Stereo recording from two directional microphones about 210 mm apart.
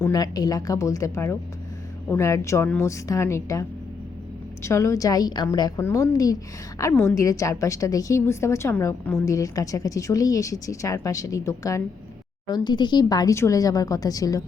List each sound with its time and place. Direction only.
0.0 s a woman's voice: 20° left (ahead or behind)